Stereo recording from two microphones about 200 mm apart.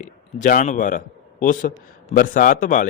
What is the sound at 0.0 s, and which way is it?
A man's voice, 40° left (ahead or behind).